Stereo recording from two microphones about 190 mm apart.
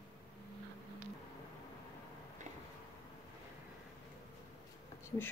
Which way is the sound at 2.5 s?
40° right (ahead or behind).